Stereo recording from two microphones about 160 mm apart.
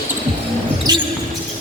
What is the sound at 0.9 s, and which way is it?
Basketball bounce, 25° right (ahead or behind).